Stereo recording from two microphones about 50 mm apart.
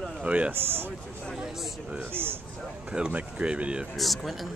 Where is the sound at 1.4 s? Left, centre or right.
Centre.